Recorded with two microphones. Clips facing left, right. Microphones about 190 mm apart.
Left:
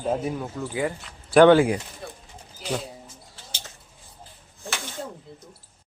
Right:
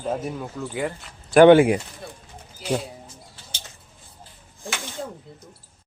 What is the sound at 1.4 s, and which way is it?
Speech, 20° right (ahead or behind).